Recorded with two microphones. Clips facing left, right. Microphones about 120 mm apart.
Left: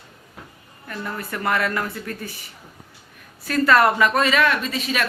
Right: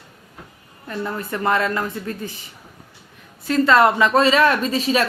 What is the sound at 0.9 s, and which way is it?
Speech, 25° right (ahead or behind).